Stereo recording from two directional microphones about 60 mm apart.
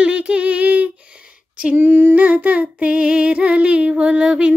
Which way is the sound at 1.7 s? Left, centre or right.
Right.